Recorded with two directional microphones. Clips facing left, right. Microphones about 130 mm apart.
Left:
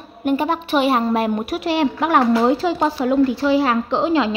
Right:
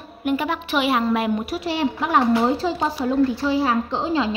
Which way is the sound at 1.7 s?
65° left (ahead or behind).